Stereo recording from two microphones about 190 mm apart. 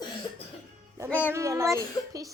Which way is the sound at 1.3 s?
15° right (ahead or behind).